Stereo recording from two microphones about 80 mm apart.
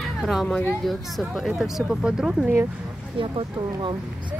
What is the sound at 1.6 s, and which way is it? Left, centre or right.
Speech, centre.